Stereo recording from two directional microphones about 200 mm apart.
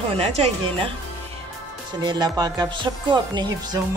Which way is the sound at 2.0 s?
20° right (ahead or behind).